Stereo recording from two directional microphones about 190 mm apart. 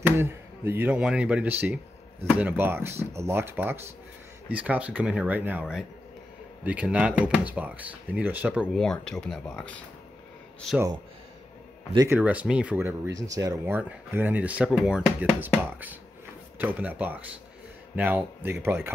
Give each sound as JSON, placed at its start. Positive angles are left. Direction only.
{"t": 0.0, "sound": "speech", "side_deg": -10}
{"t": 11.9, "sound": "speech", "side_deg": -20}
{"t": 12.2, "sound": "speech", "side_deg": -5}